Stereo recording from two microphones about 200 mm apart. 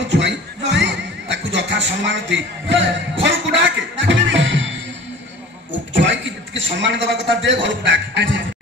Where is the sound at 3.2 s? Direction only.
65° right (ahead or behind).